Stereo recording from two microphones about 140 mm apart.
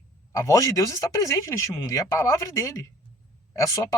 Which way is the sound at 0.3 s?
20° left (ahead or behind).